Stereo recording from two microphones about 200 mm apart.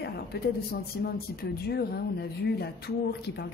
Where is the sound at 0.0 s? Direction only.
55° left (ahead or behind).